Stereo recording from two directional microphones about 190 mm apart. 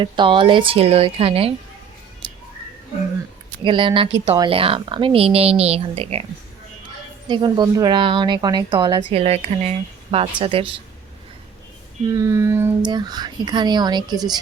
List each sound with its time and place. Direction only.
0.0 s a woman's voice: 25° right (ahead or behind)
2.2 s music: 25° right (ahead or behind)
3.6 s a woman's voice: 25° right (ahead or behind)
7.3 s a woman's voice: 25° right (ahead or behind)
12.1 s a sound: 15° right (ahead or behind)
12.8 s a woman's voice: 25° right (ahead or behind)